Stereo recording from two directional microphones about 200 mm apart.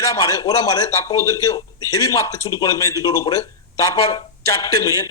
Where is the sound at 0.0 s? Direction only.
15° left (ahead or behind).